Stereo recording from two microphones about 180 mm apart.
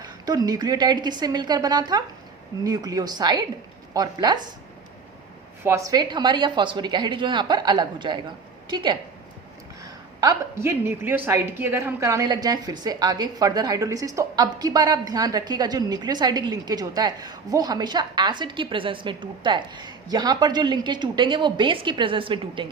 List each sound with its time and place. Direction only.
0.0 s a woman's voice: 20° right (ahead or behind)
5.6 s a woman's voice: 15° right (ahead or behind)